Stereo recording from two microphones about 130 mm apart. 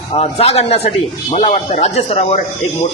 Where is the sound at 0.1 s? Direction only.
50° left (ahead or behind).